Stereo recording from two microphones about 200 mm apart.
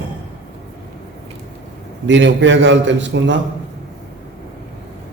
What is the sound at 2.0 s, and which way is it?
A man's voice, 65° right (ahead or behind).